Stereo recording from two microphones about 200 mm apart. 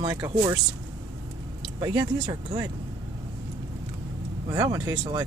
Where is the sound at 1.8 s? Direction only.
20° right (ahead or behind).